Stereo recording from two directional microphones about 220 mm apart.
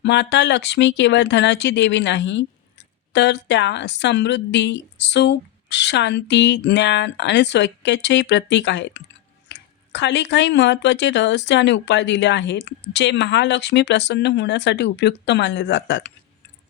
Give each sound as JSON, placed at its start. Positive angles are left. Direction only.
{"t": 0.0, "sound": "speech", "side_deg": 55}